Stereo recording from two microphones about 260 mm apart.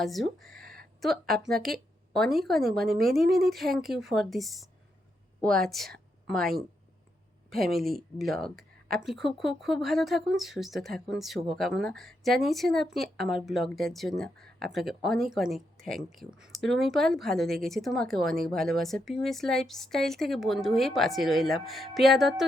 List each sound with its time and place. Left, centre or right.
0.0 s speech: centre
0.6 s a sound: right
1.3 s a woman's voice: centre